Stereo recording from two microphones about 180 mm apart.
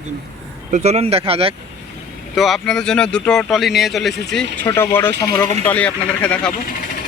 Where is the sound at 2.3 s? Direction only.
Centre (ahead or behind).